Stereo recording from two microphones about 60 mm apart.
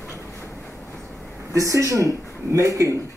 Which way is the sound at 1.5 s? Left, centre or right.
Right.